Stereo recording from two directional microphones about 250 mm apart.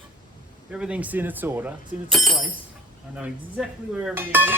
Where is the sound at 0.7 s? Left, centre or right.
Centre.